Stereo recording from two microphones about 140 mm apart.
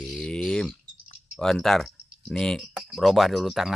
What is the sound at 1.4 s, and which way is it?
Speech, 5° left (ahead or behind).